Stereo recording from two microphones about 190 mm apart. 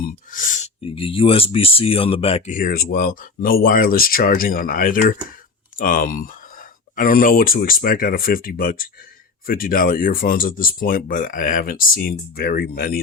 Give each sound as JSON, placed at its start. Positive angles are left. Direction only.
{"t": 0.3, "sound": "speech", "side_deg": 45}